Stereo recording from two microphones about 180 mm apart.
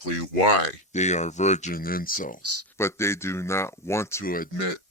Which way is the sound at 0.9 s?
40° left (ahead or behind).